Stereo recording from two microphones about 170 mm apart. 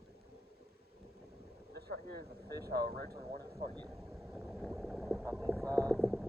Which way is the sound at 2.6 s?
65° right (ahead or behind).